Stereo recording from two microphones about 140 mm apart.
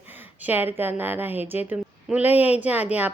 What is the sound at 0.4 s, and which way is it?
A woman's voice, 15° right (ahead or behind).